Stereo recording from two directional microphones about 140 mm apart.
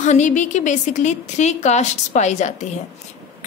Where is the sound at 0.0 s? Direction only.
60° left (ahead or behind).